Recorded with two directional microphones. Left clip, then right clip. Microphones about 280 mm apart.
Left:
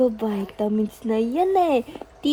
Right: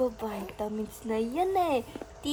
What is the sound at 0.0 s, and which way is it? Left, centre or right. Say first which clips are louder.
Speech: left 8 dB; left.